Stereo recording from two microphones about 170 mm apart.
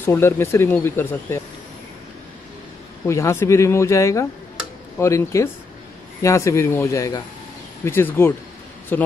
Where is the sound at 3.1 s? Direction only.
15° left (ahead or behind).